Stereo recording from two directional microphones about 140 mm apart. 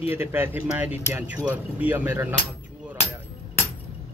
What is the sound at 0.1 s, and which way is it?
Speech, 15° right (ahead or behind).